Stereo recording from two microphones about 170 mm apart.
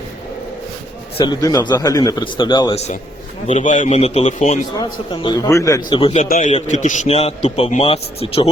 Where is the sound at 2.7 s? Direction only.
40° left (ahead or behind).